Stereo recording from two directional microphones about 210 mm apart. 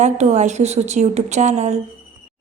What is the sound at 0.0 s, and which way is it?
A woman's voice, 35° right (ahead or behind).